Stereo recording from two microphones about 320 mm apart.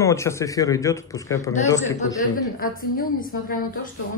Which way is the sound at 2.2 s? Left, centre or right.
Left.